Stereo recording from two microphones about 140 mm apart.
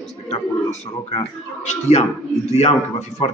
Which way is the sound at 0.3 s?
50° left (ahead or behind).